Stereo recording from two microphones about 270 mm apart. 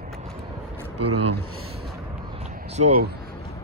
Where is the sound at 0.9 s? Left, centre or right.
Right.